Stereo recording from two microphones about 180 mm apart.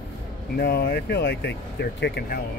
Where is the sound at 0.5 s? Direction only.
60° left (ahead or behind).